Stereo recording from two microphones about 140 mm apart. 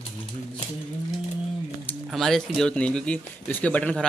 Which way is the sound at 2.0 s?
Centre (ahead or behind).